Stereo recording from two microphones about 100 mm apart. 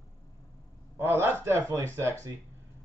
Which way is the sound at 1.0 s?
25° right (ahead or behind).